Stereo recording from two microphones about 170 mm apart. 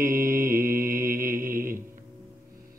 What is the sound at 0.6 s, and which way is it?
Mantra, 55° right (ahead or behind).